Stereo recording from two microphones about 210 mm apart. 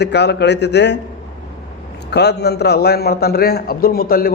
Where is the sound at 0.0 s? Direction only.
50° left (ahead or behind).